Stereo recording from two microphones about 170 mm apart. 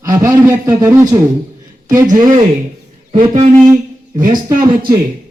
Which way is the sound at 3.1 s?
50° right (ahead or behind).